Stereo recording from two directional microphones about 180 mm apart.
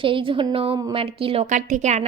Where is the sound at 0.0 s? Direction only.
30° right (ahead or behind).